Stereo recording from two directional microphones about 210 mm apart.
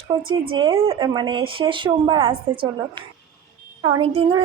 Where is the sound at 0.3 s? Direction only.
20° right (ahead or behind).